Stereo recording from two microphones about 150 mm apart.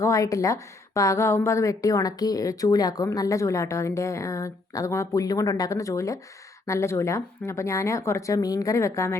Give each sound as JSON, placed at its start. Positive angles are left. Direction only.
{"t": 0.0, "sound": "a woman's voice", "side_deg": 20}